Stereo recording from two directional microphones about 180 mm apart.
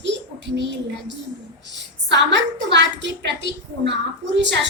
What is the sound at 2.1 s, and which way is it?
A woman's voice, 80° right.